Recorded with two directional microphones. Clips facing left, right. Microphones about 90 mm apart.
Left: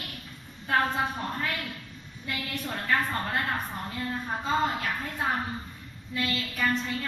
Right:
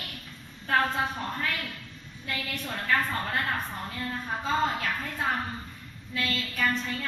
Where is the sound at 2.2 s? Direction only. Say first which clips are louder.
Left 1 dB; 10° left (ahead or behind).